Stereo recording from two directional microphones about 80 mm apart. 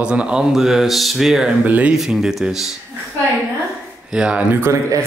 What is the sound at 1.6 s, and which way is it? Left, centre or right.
Speech, centre.